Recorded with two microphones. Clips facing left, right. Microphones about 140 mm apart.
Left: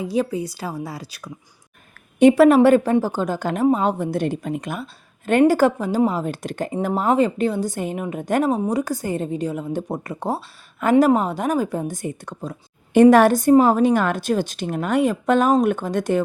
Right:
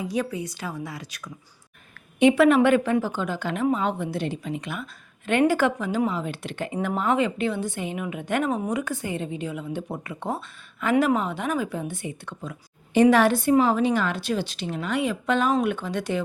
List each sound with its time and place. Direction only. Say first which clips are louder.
0.0 s a woman's voice: left 5 dB; 30° left (ahead or behind); by 16.2 s 45° left (ahead or behind)